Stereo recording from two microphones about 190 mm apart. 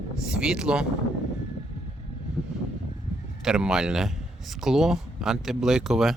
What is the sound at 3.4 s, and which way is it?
Speech, 5° right (ahead or behind).